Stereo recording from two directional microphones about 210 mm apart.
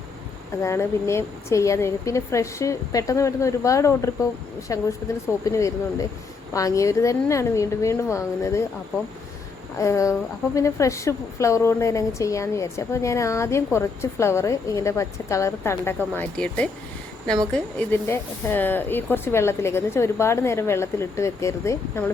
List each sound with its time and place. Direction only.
0.6 s a woman's voice: 15° left (ahead or behind)
9.7 s a woman's voice: 15° left (ahead or behind)